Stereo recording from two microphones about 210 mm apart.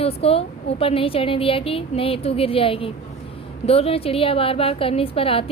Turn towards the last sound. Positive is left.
turn(degrees=25)  # may be behind; listen again after turning